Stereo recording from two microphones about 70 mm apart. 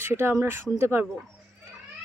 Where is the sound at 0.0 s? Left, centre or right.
Right.